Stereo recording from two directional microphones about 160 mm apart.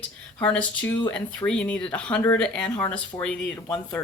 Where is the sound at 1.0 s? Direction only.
10° left (ahead or behind).